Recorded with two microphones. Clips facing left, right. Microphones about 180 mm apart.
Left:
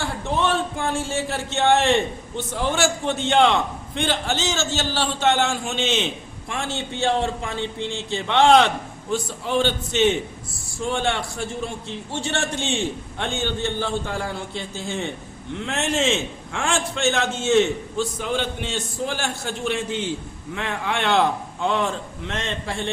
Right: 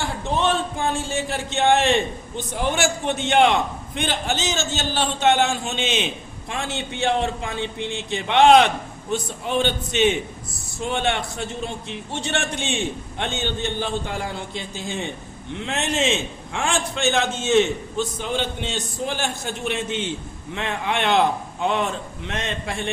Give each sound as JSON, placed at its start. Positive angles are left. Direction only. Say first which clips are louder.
{"t": 0.3, "sound": "a man's voice", "louder": "even", "side_deg": -20}